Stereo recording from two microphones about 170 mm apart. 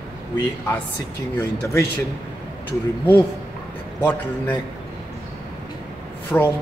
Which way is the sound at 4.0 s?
10° left (ahead or behind).